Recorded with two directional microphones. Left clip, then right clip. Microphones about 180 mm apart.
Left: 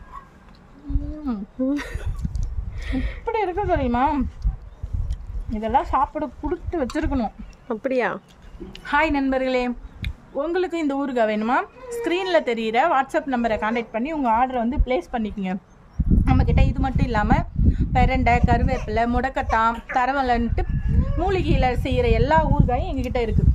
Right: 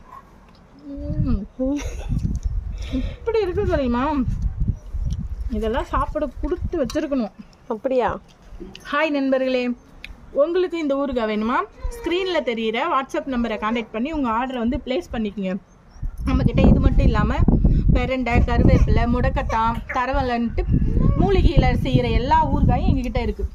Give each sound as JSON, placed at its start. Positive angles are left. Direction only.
{"t": 1.6, "sound": "speech", "side_deg": 10}
{"t": 3.3, "sound": "a woman's voice", "side_deg": 20}
{"t": 4.6, "sound": "a sound", "side_deg": 5}
{"t": 5.0, "sound": "speech", "side_deg": 25}
{"t": 7.7, "sound": "speech", "side_deg": 5}
{"t": 8.7, "sound": "a woman's voice", "side_deg": 30}